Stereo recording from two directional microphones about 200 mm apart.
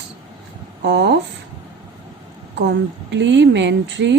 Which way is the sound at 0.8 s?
60° right (ahead or behind).